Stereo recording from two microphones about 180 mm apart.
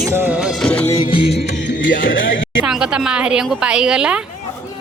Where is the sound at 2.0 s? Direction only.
90° left.